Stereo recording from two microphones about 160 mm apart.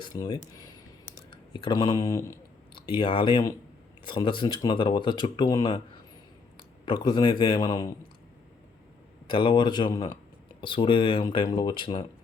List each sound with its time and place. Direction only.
0.0 s speech: 25° left (ahead or behind)
6.8 s a man's voice: 30° left (ahead or behind)
9.3 s a man's voice: 30° left (ahead or behind)